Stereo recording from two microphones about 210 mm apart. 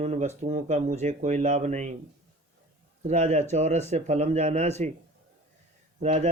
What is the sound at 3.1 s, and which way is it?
Speech, 35° right (ahead or behind).